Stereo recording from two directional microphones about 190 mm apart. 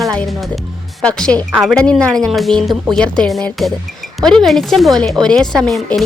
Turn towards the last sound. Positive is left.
turn(degrees=0)  # may be behind; listen again after turning